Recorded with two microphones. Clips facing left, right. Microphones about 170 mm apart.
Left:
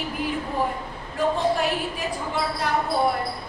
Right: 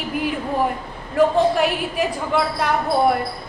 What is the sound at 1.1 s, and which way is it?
Speech, 70° right (ahead or behind).